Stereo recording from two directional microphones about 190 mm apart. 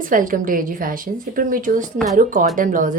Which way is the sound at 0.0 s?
45° right (ahead or behind).